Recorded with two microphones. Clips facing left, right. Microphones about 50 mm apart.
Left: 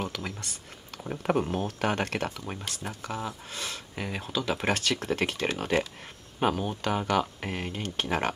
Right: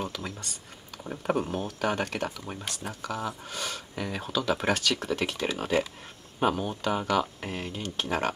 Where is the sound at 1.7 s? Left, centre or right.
Left.